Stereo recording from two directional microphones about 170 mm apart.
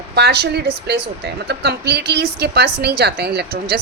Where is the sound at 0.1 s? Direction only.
75° right (ahead or behind).